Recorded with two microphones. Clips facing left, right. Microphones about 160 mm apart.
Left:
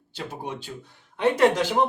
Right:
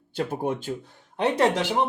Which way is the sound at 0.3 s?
50° right (ahead or behind).